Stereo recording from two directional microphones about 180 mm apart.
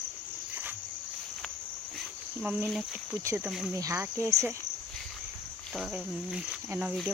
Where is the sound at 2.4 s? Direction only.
5° right (ahead or behind).